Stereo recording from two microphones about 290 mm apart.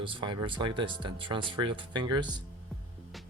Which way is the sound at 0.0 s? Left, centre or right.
Centre.